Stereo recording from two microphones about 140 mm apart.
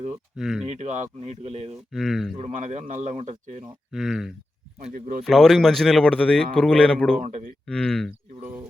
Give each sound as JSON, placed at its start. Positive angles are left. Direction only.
{"t": 0.3, "sound": "speech", "side_deg": -5}
{"t": 0.7, "sound": "a man's voice", "side_deg": -55}
{"t": 1.9, "sound": "speech", "side_deg": 0}
{"t": 2.4, "sound": "a man's voice", "side_deg": -55}
{"t": 3.9, "sound": "speech", "side_deg": 0}
{"t": 4.8, "sound": "speech", "side_deg": -50}
{"t": 5.2, "sound": "speech", "side_deg": 0}
{"t": 7.2, "sound": "a man's voice", "side_deg": -60}
{"t": 7.7, "sound": "speech", "side_deg": 5}
{"t": 8.4, "sound": "speech", "side_deg": -15}